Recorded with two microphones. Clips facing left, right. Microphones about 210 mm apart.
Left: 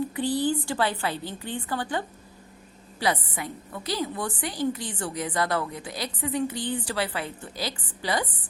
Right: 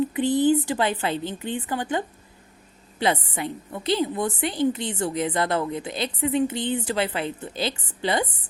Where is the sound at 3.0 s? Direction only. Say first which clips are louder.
Right 3 dB; 25° right (ahead or behind).